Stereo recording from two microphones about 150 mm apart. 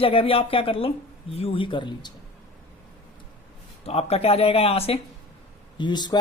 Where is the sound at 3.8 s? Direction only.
40° left (ahead or behind).